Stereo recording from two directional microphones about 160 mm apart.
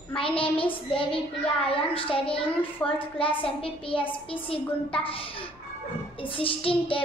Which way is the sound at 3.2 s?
35° left (ahead or behind).